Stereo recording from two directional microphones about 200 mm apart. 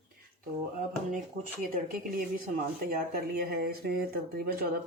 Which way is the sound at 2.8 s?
50° right (ahead or behind).